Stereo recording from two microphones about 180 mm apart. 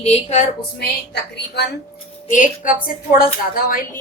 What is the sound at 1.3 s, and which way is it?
Speech, 70° left (ahead or behind).